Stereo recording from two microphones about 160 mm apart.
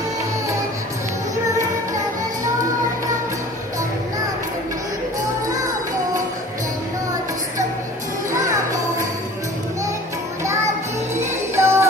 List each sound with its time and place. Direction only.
11.1 s music: 15° right (ahead or behind)